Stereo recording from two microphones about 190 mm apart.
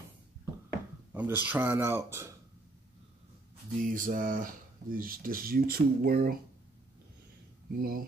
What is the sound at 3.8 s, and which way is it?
Speech, 45° right (ahead or behind).